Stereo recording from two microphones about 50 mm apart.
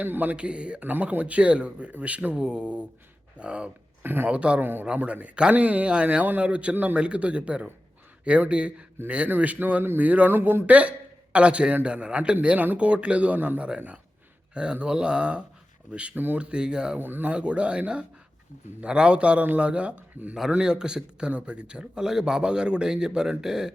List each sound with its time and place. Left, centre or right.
0.0 s speech: right
0.3 s speech: right
0.8 s speech: right
4.0 s speech: right
4.3 s speech: right
4.6 s speech: right
4.9 s speech: right
10.7 s speech: right
13.7 s speech: right
16.1 s speech: right
16.4 s speech: centre
17.0 s speech: right
17.2 s speech: right